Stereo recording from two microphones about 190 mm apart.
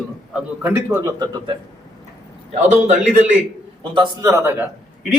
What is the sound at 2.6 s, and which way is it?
Speech, 40° right (ahead or behind).